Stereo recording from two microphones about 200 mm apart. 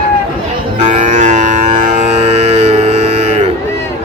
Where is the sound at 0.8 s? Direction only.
40° right (ahead or behind).